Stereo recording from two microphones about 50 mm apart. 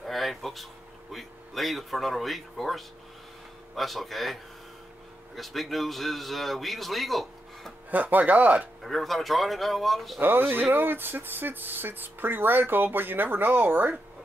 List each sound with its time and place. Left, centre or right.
0.0 s a sound: centre
1.1 s a man's voice: centre
7.9 s speech: right
8.8 s a man's voice: centre
10.5 s speech: right